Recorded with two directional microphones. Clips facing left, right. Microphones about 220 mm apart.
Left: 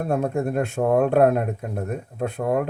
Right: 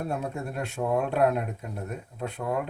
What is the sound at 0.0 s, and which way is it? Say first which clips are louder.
Speech: left 8 dB; 50° left (ahead or behind).